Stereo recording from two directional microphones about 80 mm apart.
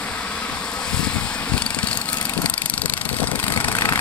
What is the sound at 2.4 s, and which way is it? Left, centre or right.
Vehicle, centre.